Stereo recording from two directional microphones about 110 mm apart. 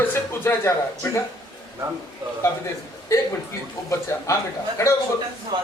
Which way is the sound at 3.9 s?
25° left (ahead or behind).